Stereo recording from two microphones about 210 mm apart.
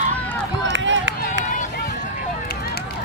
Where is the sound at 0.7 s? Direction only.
60° right (ahead or behind).